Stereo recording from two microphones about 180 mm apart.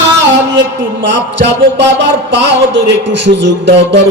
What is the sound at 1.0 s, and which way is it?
Speech, 75° right (ahead or behind).